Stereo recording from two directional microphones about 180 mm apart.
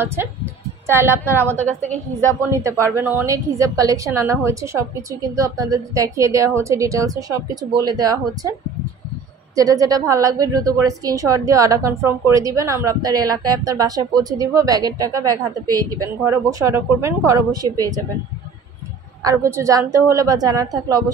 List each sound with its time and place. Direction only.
0.0 s a woman's voice: 15° right (ahead or behind)
2.5 s a woman's voice: 15° right (ahead or behind)
9.6 s a woman's voice: 20° right (ahead or behind)
19.2 s a woman's voice: 15° right (ahead or behind)